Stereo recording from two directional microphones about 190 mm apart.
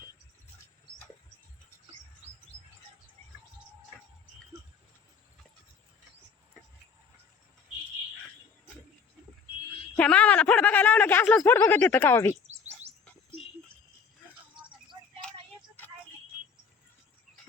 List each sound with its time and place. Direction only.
10.0 s speech: 5° left (ahead or behind)
15.2 s vehicle: 5° left (ahead or behind)